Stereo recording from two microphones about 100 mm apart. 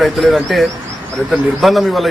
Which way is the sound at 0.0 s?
Centre (ahead or behind).